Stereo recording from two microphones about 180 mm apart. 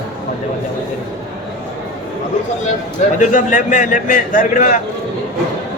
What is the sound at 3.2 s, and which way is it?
A man's voice, 45° left (ahead or behind).